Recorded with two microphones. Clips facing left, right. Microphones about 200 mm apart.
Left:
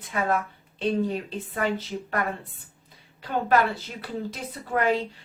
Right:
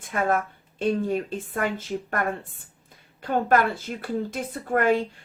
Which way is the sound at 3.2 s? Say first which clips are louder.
Right 1 dB; 50° right (ahead or behind).